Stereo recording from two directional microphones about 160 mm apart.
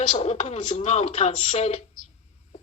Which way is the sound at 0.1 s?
45° left (ahead or behind).